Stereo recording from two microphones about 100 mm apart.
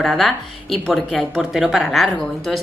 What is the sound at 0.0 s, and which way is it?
A woman's voice, centre (ahead or behind).